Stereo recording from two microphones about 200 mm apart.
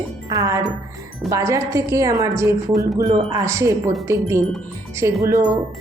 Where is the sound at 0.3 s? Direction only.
15° right (ahead or behind).